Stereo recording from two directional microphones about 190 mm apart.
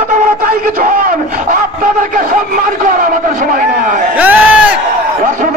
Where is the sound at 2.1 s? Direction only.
45° right (ahead or behind).